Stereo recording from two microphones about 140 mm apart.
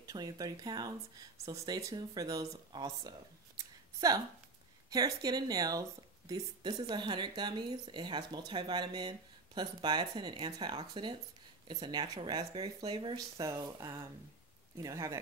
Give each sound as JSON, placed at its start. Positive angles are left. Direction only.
{"t": 0.0, "sound": "speech", "side_deg": -25}
{"t": 3.5, "sound": "a sound", "side_deg": -25}
{"t": 4.8, "sound": "speech", "side_deg": -30}